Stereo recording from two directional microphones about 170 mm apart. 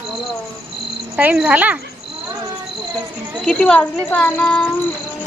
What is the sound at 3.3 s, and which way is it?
A woman's voice, 5° left (ahead or behind).